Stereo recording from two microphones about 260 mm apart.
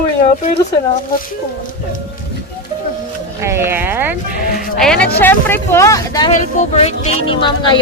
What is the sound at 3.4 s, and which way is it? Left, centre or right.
Speech, centre.